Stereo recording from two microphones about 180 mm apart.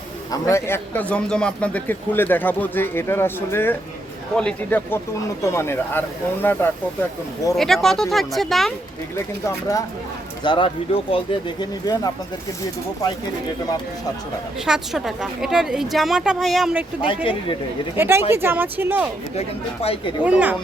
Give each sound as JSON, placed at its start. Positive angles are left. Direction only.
{"t": 0.3, "sound": "a man's voice", "side_deg": 15}
{"t": 9.1, "sound": "a man's voice", "side_deg": 15}
{"t": 10.4, "sound": "speech", "side_deg": 25}
{"t": 14.6, "sound": "a woman's voice", "side_deg": -5}
{"t": 19.4, "sound": "speech", "side_deg": 35}
{"t": 20.2, "sound": "speech", "side_deg": -10}